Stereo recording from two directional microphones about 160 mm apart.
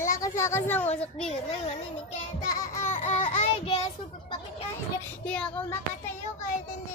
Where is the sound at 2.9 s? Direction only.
45° left (ahead or behind).